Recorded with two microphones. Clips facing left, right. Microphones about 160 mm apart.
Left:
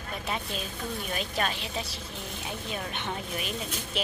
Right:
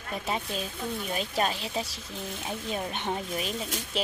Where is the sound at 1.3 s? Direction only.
35° right (ahead or behind).